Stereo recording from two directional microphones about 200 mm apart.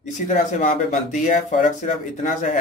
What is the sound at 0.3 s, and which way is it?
Speech, 40° left (ahead or behind).